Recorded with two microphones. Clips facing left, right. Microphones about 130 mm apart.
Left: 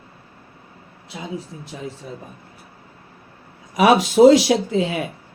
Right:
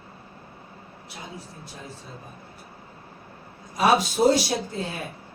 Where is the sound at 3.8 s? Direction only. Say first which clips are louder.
Left 8 dB; 90° left.